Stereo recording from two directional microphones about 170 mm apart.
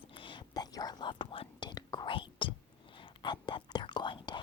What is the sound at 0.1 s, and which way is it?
Whispering, 30° left (ahead or behind).